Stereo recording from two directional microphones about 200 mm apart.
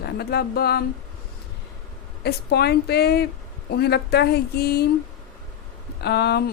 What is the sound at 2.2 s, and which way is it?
A woman's voice, 55° left (ahead or behind).